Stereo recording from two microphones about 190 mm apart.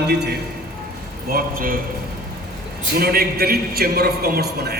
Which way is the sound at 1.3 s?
50° right (ahead or behind).